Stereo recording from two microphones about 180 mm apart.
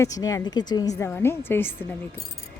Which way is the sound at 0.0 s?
20° left (ahead or behind).